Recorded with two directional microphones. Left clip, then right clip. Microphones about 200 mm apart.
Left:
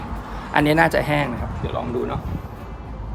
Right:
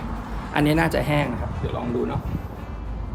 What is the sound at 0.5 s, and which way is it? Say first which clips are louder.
Speech: left 4 dB; 20° left (ahead or behind).